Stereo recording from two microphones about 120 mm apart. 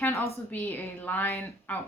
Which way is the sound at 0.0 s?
25° left (ahead or behind).